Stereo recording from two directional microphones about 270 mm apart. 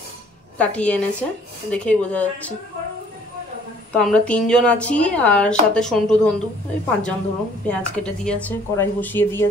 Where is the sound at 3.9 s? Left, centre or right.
Centre.